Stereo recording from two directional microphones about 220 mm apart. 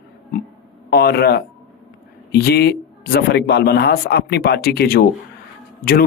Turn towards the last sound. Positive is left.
turn(degrees=45)  # may be behind; listen again after turning